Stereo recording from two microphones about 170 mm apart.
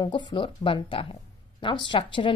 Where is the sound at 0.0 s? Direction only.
30° left (ahead or behind).